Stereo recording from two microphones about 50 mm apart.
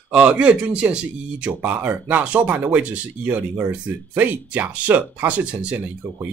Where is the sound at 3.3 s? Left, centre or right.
Right.